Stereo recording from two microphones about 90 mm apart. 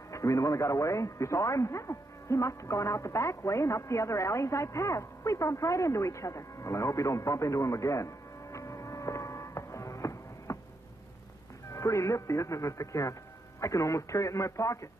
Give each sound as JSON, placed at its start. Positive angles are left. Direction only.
{"t": 0.1, "sound": "a man's voice", "side_deg": 35}
{"t": 11.7, "sound": "speech", "side_deg": 35}